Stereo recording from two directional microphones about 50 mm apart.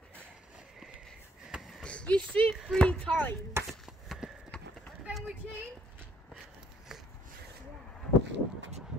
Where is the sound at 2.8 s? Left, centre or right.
Left.